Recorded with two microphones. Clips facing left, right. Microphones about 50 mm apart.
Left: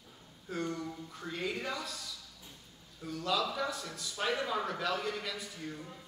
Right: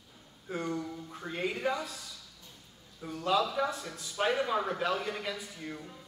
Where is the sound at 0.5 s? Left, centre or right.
Centre.